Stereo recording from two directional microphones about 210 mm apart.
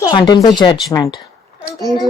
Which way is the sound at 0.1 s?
20° left (ahead or behind).